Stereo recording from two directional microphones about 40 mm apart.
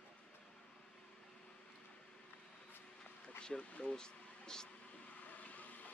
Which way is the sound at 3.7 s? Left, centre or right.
Left.